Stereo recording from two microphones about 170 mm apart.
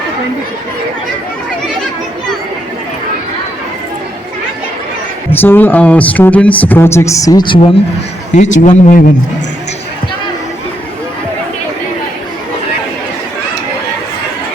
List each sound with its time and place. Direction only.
5.3 s speech: 10° left (ahead or behind)
8.4 s speech: 45° left (ahead or behind)